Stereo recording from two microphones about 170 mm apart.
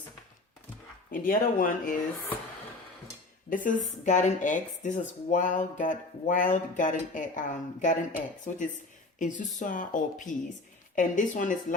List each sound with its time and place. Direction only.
1.1 s speech: 55° left (ahead or behind)
3.5 s speech: 50° left (ahead or behind)